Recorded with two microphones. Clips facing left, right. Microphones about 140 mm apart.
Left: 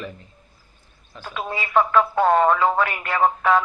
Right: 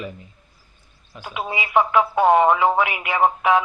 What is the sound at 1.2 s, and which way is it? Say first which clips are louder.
Speech: right 1 dB; 15° right (ahead or behind).